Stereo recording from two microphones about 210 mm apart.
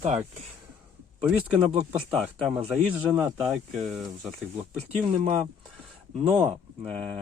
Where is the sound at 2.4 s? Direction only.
5° right (ahead or behind).